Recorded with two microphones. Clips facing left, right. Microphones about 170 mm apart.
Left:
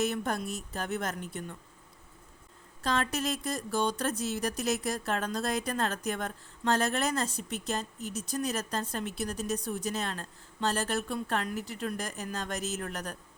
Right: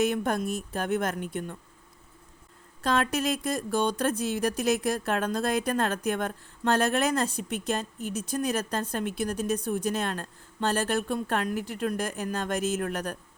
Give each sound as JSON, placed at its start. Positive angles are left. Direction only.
{"t": 0.0, "sound": "a woman's voice", "side_deg": -55}
{"t": 2.8, "sound": "speech", "side_deg": -55}